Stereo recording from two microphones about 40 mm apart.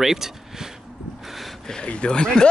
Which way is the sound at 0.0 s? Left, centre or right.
Centre.